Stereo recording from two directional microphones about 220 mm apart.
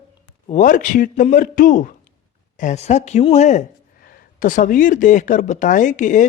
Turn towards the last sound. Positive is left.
turn(degrees=35)  # may be behind; listen again after turning